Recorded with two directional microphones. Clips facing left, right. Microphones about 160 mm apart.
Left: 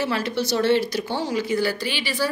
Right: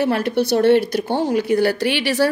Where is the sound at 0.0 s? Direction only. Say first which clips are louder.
Right 6 dB; 55° right (ahead or behind).